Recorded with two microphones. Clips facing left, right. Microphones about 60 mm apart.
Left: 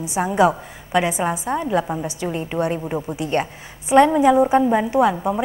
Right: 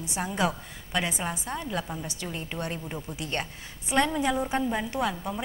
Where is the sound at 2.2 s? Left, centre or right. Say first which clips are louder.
Left 13 dB; centre.